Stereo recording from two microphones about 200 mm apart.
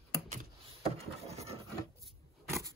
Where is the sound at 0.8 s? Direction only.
30° right (ahead or behind).